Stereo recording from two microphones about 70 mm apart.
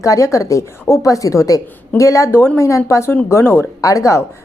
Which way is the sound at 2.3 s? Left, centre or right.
Left.